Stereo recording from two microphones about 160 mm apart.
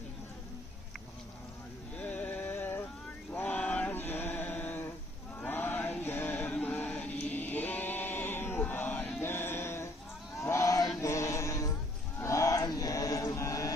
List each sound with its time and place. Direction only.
2.0 s music: 10° left (ahead or behind)
3.3 s male singing: 10° left (ahead or behind)
5.4 s music: 10° left (ahead or behind)
10.4 s chant: 15° left (ahead or behind)